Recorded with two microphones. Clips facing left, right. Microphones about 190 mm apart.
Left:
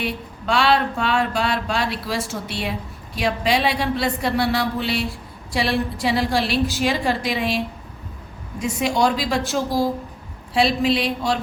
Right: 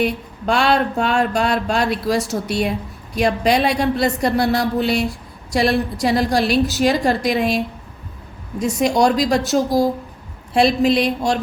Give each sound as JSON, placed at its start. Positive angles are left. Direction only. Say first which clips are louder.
{"t": 0.0, "sound": "a woman's voice", "louder": "right 6 dB", "side_deg": -50}